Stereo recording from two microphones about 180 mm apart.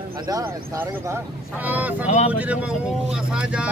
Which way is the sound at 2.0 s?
40° left (ahead or behind).